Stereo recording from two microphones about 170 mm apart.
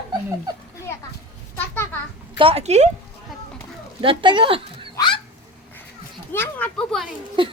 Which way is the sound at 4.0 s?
30° right (ahead or behind).